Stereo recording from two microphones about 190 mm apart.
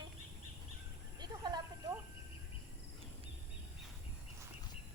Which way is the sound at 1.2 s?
20° right (ahead or behind).